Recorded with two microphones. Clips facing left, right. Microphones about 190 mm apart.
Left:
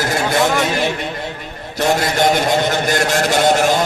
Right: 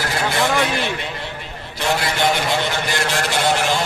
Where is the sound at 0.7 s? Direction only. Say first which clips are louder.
Left 4 dB; 45° left (ahead or behind).